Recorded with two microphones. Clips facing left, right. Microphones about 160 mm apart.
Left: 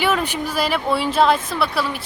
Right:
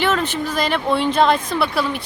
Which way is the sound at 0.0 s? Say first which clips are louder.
Right 1 dB; 10° left (ahead or behind).